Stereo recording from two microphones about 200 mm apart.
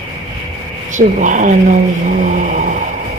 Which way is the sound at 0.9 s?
40° right (ahead or behind).